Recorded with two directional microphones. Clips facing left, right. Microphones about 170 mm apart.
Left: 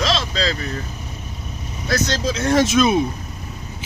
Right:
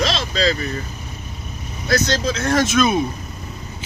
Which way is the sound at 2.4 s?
20° left (ahead or behind).